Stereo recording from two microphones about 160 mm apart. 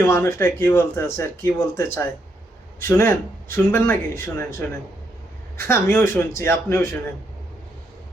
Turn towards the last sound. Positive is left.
turn(degrees=15)  # may be behind; listen again after turning